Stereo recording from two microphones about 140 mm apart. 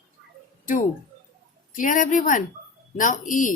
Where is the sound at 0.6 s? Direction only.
70° left (ahead or behind).